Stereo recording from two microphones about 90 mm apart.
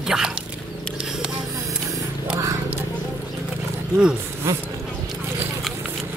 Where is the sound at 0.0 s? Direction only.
5° right (ahead or behind).